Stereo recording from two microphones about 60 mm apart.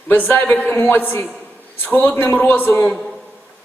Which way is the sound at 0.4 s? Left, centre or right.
Left.